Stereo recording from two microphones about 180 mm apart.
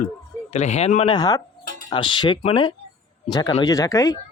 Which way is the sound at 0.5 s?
40° left (ahead or behind).